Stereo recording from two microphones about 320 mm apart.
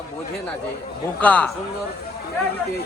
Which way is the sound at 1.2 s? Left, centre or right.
Centre.